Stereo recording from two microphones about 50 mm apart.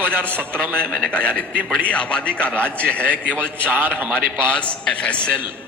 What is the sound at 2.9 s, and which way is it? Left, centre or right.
A man's voice, right.